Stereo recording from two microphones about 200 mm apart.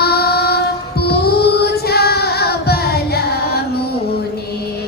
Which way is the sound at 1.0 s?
50° left (ahead or behind).